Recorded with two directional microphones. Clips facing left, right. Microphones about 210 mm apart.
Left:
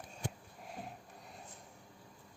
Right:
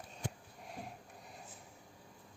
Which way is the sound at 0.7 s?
Centre (ahead or behind).